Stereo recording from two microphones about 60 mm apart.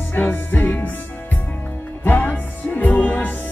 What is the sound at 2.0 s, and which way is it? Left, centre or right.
Music, left.